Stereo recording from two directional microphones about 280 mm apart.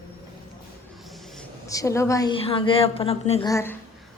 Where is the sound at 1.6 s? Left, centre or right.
Centre.